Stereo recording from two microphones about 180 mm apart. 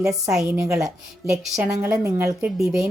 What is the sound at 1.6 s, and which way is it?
A woman's voice, 15° right (ahead or behind).